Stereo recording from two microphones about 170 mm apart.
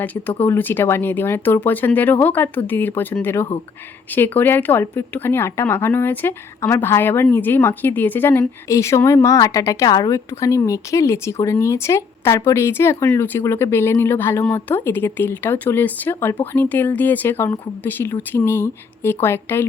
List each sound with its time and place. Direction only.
0.0 s speech: 10° left (ahead or behind)